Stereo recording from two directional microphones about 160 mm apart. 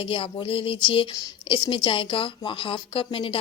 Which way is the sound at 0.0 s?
35° left (ahead or behind).